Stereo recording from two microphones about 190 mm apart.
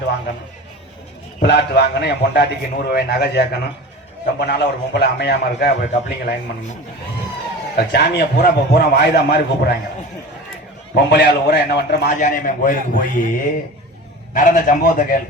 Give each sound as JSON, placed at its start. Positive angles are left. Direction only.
{"t": 1.4, "sound": "a man's voice", "side_deg": 60}
{"t": 7.8, "sound": "a man's voice", "side_deg": 60}
{"t": 10.9, "sound": "a man's voice", "side_deg": 60}
{"t": 12.2, "sound": "a man's voice", "side_deg": 45}